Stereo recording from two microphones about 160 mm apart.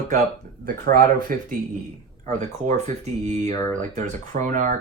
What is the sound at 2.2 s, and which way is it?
Speech, 45° right (ahead or behind).